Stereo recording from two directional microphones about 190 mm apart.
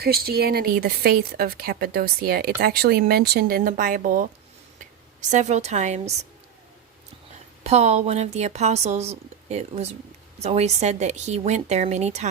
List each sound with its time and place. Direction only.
0.0 s speech: 55° right (ahead or behind)
5.3 s speech: 40° right (ahead or behind)
7.6 s speech: 35° right (ahead or behind)